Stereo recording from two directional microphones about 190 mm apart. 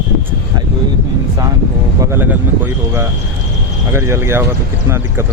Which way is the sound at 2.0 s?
10° right (ahead or behind).